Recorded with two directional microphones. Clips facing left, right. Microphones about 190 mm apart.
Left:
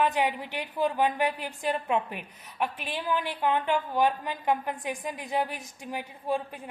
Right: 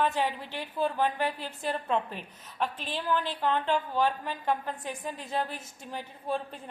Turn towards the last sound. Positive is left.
turn(degrees=10)  # may be behind; listen again after turning